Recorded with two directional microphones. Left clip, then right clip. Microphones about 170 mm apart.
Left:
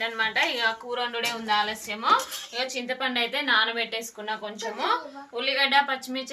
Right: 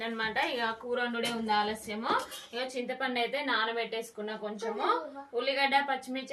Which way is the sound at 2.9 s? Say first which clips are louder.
Left 5 dB; 10° right (ahead or behind).